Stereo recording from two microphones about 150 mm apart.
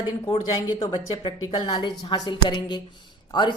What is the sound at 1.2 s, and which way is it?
A woman's voice, 30° left (ahead or behind).